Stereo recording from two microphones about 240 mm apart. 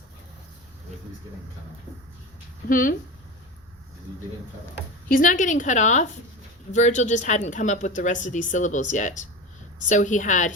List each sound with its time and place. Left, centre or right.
2.6 s a woman's voice: left
5.0 s a woman's voice: left